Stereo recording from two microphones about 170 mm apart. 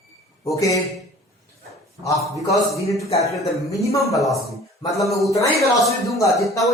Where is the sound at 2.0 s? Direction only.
20° left (ahead or behind).